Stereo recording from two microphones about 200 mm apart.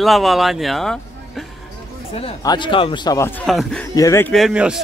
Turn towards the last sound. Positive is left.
turn(degrees=-5)  # may be behind; listen again after turning